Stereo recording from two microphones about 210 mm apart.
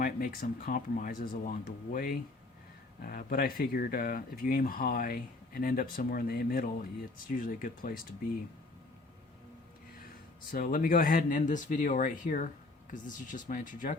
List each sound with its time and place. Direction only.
0.0 s speech: 40° left (ahead or behind)
10.5 s speech: 45° left (ahead or behind)